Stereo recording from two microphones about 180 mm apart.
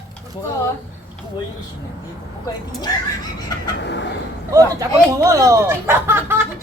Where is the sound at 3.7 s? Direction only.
80° left.